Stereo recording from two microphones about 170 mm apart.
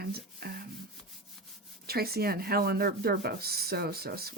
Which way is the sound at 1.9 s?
65° right (ahead or behind).